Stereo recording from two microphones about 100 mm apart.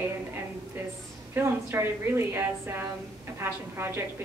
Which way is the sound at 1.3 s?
25° right (ahead or behind).